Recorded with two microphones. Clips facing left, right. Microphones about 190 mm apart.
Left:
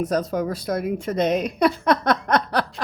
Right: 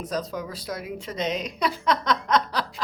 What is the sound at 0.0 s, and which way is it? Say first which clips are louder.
A woman's voice: left 7 dB; 60° left (ahead or behind).